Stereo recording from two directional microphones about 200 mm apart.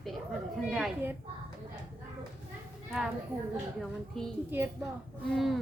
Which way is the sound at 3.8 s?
Centre (ahead or behind).